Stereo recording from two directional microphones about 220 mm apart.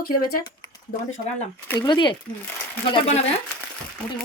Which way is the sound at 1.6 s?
15° left (ahead or behind).